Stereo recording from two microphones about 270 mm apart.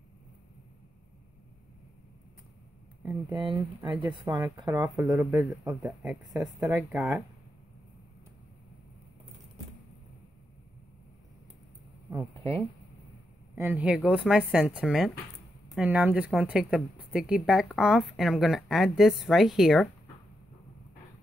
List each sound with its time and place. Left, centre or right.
3.0 s speech: centre
3.3 s a woman's voice: centre
13.6 s a woman's voice: centre